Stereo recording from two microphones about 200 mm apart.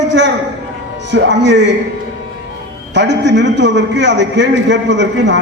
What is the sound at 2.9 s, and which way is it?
A man's voice, 60° right (ahead or behind).